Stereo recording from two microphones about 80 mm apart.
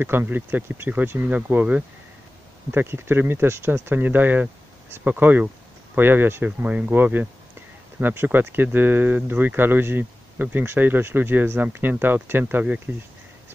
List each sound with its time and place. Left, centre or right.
0.0 s speech: right